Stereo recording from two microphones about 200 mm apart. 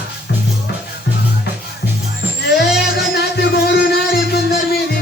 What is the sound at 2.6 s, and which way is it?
Music, 55° left (ahead or behind).